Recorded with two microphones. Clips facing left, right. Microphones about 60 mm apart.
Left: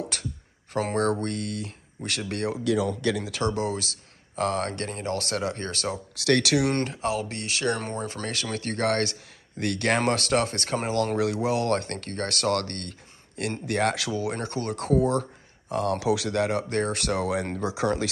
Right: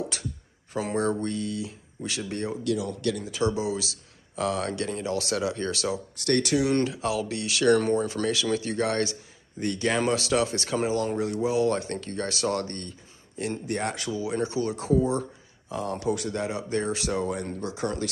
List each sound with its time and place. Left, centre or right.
0.1 s speech: left
3.5 s speech: left
6.1 s speech: left
6.7 s speech: left
11.0 s speech: left
11.4 s speech: left